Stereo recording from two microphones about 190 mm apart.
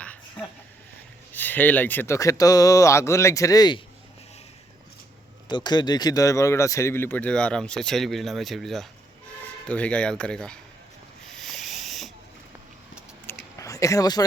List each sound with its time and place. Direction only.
1.3 s speech: 10° left (ahead or behind)
5.5 s speech: 25° left (ahead or behind); by 10.6 s 5° left (ahead or behind)
11.3 s owl: centre (ahead or behind)
13.6 s speech: 15° left (ahead or behind)